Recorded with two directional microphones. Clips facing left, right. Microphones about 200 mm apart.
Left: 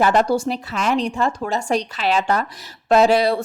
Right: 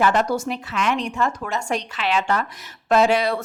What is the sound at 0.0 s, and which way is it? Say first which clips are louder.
A woman's voice: left 3 dB; 35° left (ahead or behind).